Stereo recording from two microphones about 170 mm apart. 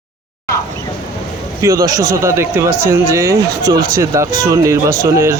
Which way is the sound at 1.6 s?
20° right (ahead or behind).